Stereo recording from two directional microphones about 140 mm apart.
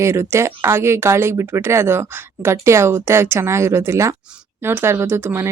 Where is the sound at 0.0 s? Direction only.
20° right (ahead or behind).